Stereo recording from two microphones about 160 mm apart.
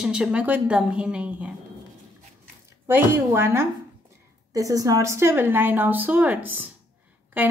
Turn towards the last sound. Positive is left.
turn(degrees=-10)  # may be behind; listen again after turning